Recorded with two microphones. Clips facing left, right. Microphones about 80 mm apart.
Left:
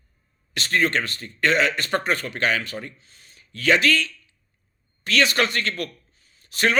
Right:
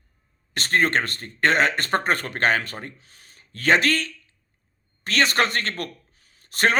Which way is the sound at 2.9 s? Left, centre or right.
Right.